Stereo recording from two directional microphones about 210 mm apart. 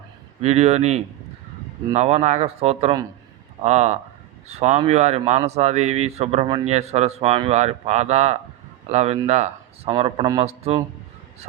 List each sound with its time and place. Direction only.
0.4 s a man's voice: 30° right (ahead or behind)